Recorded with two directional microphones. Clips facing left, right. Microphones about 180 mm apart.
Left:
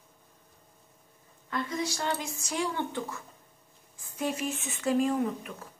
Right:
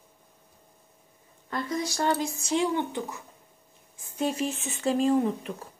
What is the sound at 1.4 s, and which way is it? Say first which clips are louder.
Speech: right 2 dB; 35° right (ahead or behind).